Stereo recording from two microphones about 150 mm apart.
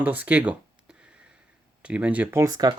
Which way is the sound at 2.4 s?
25° right (ahead or behind).